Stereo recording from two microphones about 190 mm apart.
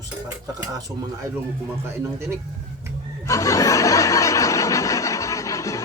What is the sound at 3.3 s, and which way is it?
Snicker, 15° left (ahead or behind).